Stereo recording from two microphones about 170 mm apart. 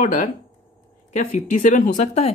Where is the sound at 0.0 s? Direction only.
50° left (ahead or behind).